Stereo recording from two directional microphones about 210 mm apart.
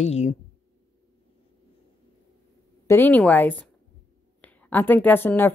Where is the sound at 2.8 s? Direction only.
10° left (ahead or behind).